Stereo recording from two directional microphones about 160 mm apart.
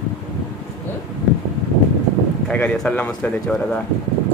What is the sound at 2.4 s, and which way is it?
Speech, 5° left (ahead or behind).